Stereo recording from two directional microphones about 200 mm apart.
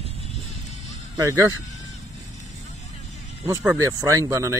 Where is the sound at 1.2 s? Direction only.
15° right (ahead or behind).